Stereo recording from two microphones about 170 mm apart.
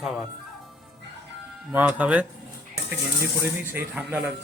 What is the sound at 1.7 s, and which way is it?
Speech, 10° right (ahead or behind).